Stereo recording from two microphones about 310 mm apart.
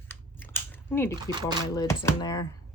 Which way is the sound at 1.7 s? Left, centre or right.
Centre.